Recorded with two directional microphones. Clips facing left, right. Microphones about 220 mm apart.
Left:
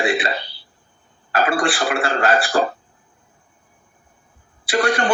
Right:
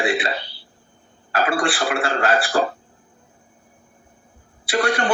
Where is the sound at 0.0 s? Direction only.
45° left (ahead or behind).